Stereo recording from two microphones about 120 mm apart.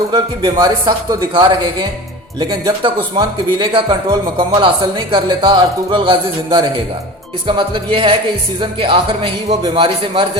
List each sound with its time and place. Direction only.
0.1 s a man's voice: 40° right (ahead or behind)